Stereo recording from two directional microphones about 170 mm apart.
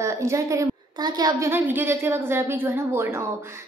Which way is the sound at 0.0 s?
15° right (ahead or behind).